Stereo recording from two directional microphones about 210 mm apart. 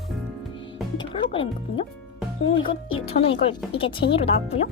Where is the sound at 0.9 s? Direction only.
25° left (ahead or behind).